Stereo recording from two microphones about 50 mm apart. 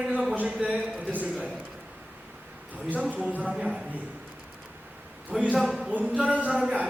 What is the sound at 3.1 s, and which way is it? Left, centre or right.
Speech, right.